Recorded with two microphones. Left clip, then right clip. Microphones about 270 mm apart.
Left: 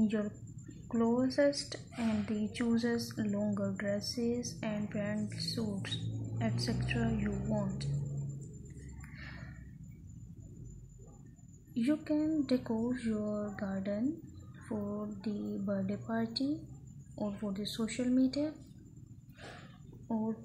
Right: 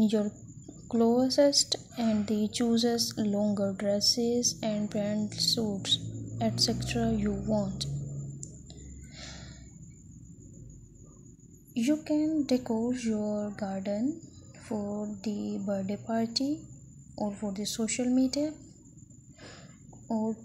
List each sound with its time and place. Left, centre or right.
0.8 s speech: right
9.1 s a sound: centre
11.7 s speech: centre